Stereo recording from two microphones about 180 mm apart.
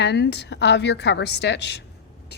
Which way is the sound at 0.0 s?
70° left (ahead or behind).